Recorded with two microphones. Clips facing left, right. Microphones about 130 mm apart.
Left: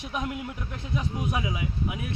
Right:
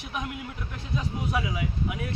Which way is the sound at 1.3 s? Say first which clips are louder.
Right 2 dB; 20° left (ahead or behind).